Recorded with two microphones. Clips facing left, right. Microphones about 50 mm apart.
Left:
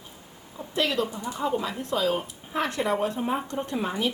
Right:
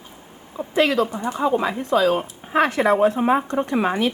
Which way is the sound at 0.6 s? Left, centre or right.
Right.